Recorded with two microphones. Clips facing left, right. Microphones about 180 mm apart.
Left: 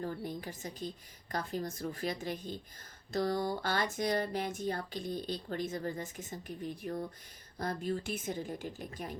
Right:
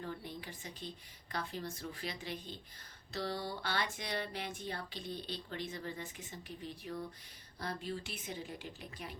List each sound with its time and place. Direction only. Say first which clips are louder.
0.0 s speech: left 6 dB; 45° left (ahead or behind)